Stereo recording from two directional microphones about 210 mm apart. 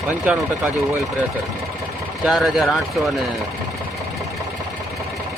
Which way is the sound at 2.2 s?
Centre (ahead or behind).